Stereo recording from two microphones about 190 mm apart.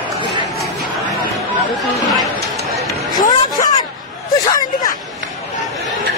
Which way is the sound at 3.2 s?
20° left (ahead or behind).